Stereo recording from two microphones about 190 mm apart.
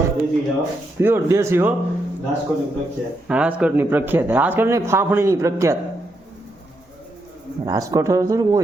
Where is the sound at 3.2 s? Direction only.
5° right (ahead or behind).